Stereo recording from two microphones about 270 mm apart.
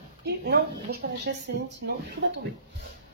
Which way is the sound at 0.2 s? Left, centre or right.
Right.